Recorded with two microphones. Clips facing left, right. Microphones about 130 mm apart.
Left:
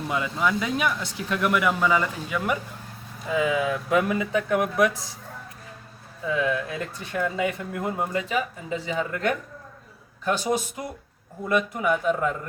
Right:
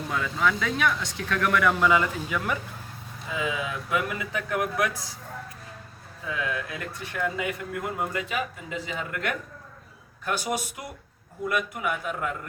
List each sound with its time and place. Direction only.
0.1 s speech: 15° left (ahead or behind)
3.3 s speech: 35° left (ahead or behind)
6.3 s speech: 25° left (ahead or behind)